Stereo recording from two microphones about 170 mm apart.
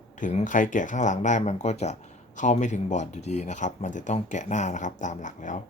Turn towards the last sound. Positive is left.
turn(degrees=45)  # may be behind; listen again after turning